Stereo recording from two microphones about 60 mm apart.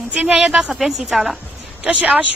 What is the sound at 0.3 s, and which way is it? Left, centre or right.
Speech, centre.